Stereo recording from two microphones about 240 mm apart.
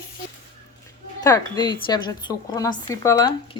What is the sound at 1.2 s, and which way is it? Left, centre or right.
A woman's voice, centre.